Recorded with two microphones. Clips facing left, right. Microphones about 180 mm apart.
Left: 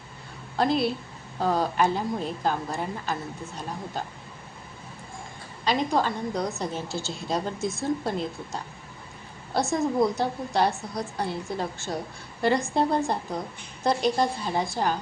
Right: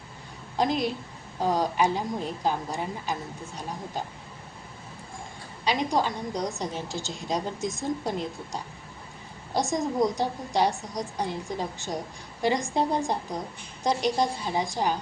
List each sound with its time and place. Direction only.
0.5 s a woman's voice: 15° right (ahead or behind)
5.6 s a woman's voice: 15° right (ahead or behind)